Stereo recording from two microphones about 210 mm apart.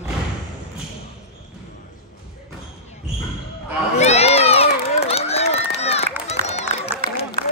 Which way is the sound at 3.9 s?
30° left (ahead or behind).